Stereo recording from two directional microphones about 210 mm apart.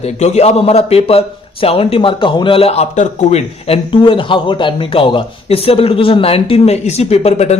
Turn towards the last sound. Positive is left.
turn(degrees=30)  # may be behind; listen again after turning